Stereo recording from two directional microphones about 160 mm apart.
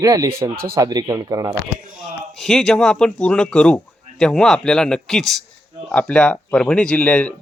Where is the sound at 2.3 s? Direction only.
5° left (ahead or behind).